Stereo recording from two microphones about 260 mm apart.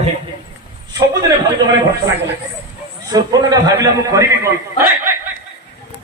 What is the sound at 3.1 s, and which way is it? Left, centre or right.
A man's voice, centre.